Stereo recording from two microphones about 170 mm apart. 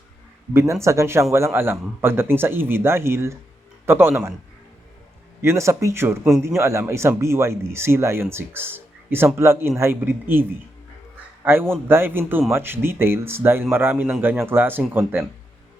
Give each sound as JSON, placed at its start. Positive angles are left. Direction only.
{"t": 0.5, "sound": "speech", "side_deg": -15}
{"t": 5.4, "sound": "speech", "side_deg": -15}
{"t": 11.4, "sound": "speech", "side_deg": -15}